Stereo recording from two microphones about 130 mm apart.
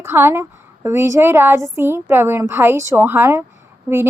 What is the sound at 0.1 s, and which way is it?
A woman's voice, 20° right (ahead or behind).